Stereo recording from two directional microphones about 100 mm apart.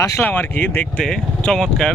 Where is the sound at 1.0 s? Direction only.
5° left (ahead or behind).